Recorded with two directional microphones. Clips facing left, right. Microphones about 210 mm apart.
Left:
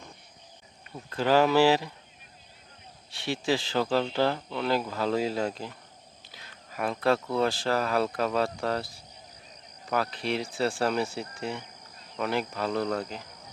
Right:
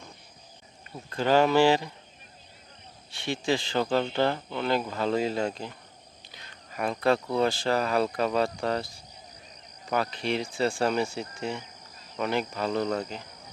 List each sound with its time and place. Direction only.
1.1 s speech: 5° left (ahead or behind)
3.1 s speech: centre (ahead or behind)